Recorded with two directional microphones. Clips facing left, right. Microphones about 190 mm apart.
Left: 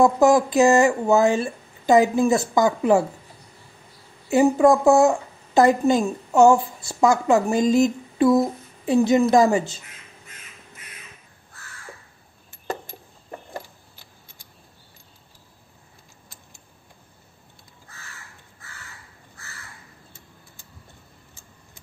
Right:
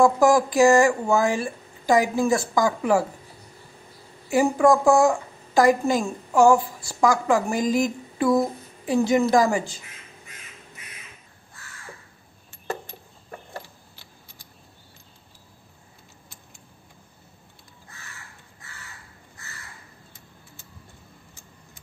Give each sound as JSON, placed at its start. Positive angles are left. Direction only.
{"t": 0.0, "sound": "a woman's voice", "side_deg": 20}
{"t": 4.3, "sound": "a woman's voice", "side_deg": 25}